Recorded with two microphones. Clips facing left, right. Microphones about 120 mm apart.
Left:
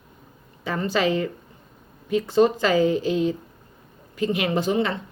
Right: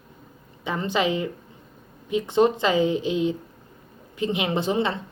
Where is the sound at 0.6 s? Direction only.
20° right (ahead or behind).